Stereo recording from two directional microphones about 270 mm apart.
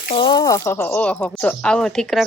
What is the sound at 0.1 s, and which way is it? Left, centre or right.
Speech, centre.